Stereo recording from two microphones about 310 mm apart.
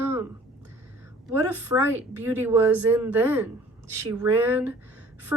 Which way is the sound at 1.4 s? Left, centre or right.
Centre.